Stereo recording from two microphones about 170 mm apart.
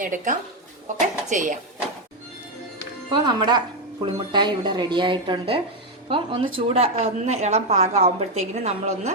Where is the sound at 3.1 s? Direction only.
25° right (ahead or behind).